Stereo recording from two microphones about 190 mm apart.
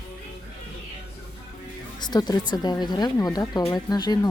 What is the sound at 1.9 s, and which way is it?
Speech, 20° left (ahead or behind).